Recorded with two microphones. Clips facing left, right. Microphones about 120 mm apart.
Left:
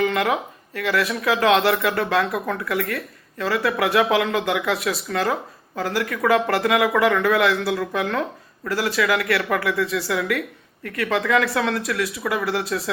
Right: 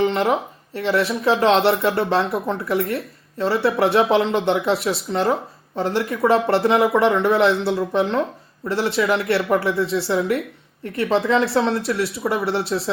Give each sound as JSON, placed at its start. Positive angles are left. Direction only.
{"t": 0.0, "sound": "speech", "side_deg": -30}